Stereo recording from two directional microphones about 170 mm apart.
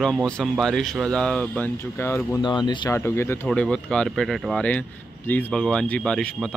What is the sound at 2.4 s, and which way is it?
Speech, 25° left (ahead or behind).